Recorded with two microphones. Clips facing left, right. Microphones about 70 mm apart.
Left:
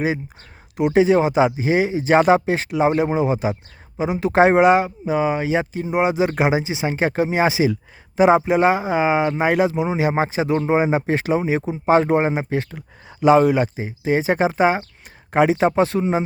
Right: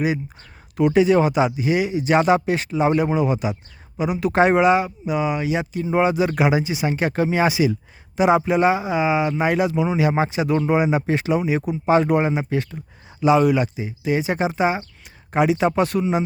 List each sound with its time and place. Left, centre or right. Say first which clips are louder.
0.8 s speech: even; left
5.9 s speech: even; left
12.7 s a sound: even; left
13.2 s speech: left 2 dB; left